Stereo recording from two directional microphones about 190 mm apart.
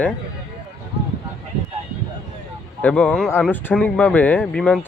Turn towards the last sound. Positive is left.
turn(degrees=5)  # may be behind; listen again after turning